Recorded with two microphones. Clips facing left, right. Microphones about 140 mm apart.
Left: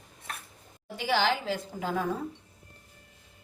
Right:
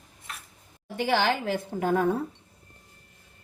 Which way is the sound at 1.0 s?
60° right (ahead or behind).